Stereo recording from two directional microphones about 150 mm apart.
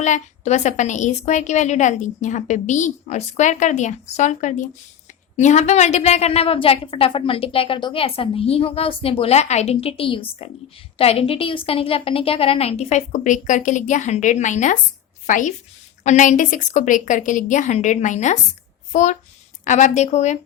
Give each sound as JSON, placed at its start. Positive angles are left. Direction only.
{"t": 0.0, "sound": "a woman's voice", "side_deg": 50}